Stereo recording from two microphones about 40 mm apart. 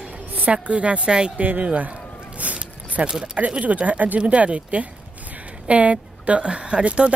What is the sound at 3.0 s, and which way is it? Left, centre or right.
Speech, right.